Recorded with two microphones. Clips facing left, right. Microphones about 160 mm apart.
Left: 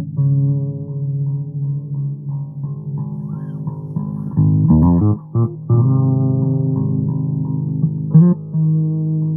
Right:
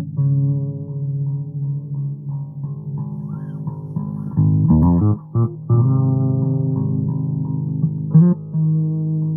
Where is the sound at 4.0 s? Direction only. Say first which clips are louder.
Left 2 dB; 35° left (ahead or behind).